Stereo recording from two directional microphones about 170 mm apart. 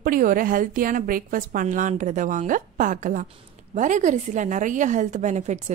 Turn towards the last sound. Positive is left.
turn(degrees=-45)  # may be behind; listen again after turning